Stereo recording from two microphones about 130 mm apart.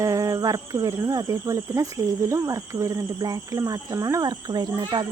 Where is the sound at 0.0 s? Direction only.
25° right (ahead or behind).